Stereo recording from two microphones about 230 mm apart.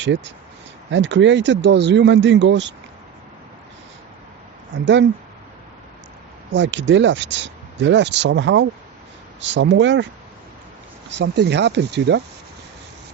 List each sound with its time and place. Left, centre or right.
0.0 s speech: right
6.5 s speech: right
11.2 s speech: right